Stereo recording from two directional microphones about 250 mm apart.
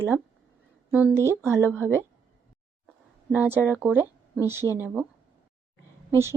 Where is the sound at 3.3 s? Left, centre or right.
Centre.